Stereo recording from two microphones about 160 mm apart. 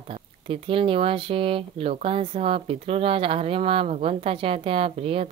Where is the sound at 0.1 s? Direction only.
35° right (ahead or behind).